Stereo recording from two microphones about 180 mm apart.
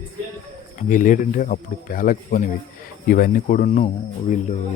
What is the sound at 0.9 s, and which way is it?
Speech, 45° left (ahead or behind).